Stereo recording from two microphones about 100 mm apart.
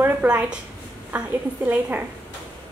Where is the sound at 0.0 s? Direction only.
20° right (ahead or behind).